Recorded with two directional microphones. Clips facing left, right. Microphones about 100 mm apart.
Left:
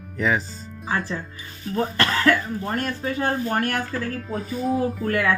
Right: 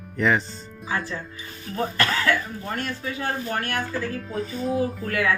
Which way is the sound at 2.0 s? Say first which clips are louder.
Left 3 dB; 40° left (ahead or behind).